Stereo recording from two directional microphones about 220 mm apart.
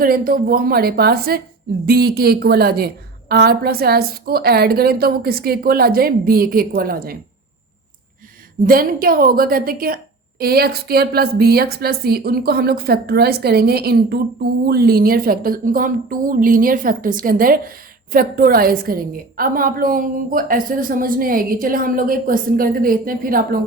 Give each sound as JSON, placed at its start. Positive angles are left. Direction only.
{"t": 0.0, "sound": "a woman's voice", "side_deg": -40}
{"t": 8.6, "sound": "a woman's voice", "side_deg": -40}